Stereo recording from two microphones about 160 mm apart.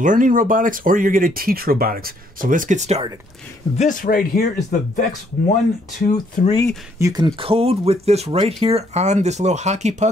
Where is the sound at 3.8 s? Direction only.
55° left (ahead or behind).